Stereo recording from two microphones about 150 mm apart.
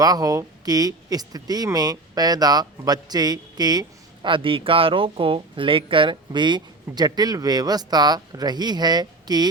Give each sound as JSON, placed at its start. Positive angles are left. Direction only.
{"t": 0.0, "sound": "speech", "side_deg": -25}